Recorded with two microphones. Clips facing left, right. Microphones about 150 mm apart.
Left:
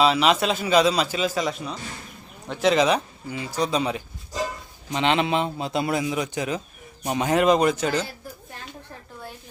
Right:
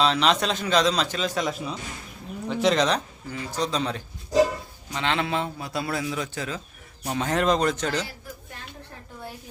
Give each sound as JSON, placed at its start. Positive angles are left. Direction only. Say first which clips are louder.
{"t": 0.0, "sound": "a man's voice", "louder": "left 3 dB", "side_deg": 5}